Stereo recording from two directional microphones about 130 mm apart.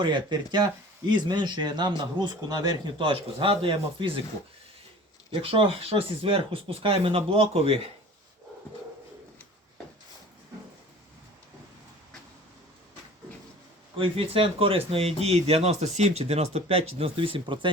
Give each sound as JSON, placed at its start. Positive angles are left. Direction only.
{"t": 0.0, "sound": "a man's voice", "side_deg": -35}
{"t": 5.3, "sound": "speech", "side_deg": -45}
{"t": 13.9, "sound": "speech", "side_deg": -45}